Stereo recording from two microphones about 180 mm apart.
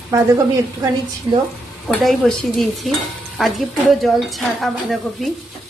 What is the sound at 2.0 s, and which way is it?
Speech, centre (ahead or behind).